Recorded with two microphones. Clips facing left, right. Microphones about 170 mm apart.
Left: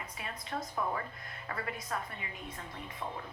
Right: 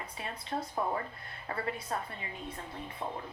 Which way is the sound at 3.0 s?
30° right (ahead or behind).